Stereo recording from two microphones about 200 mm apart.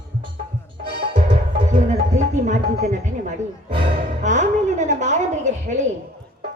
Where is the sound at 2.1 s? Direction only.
35° right (ahead or behind).